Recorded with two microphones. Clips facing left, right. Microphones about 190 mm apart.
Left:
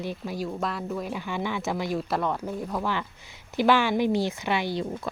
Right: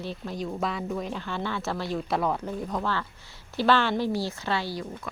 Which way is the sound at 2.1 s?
Centre (ahead or behind).